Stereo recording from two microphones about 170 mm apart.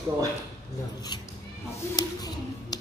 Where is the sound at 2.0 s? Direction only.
20° left (ahead or behind).